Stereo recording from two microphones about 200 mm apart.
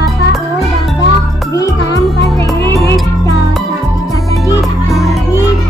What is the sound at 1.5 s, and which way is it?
Music, 15° left (ahead or behind).